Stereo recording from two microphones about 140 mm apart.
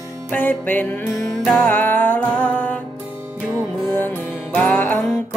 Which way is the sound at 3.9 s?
15° left (ahead or behind).